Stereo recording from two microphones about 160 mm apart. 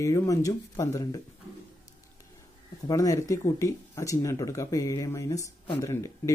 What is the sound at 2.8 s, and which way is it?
Speech, 20° left (ahead or behind).